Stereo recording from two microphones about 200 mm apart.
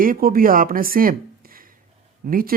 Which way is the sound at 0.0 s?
45° right (ahead or behind).